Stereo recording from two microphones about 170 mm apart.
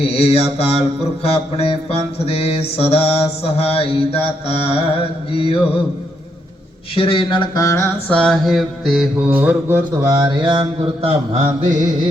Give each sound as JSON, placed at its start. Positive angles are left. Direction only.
{"t": 0.0, "sound": "mantra", "side_deg": 35}
{"t": 6.9, "sound": "mantra", "side_deg": 30}
{"t": 9.4, "sound": "music", "side_deg": -10}
{"t": 11.0, "sound": "mantra", "side_deg": -45}